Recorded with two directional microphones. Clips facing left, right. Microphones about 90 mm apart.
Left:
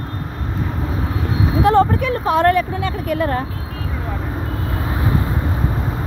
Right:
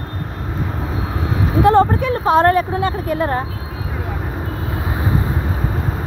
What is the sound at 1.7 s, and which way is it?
Speech, 30° right (ahead or behind).